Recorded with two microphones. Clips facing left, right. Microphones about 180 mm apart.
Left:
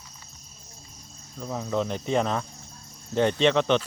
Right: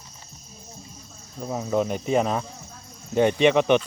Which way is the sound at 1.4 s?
20° right (ahead or behind).